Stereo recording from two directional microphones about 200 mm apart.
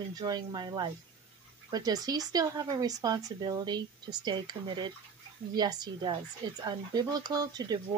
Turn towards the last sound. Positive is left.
turn(degrees=-20)  # may be behind; listen again after turning